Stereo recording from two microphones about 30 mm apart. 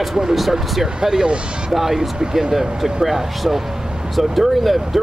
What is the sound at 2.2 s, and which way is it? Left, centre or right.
Speech, right.